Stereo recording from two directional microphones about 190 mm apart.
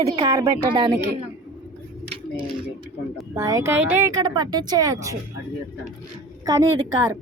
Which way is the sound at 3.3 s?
15° right (ahead or behind).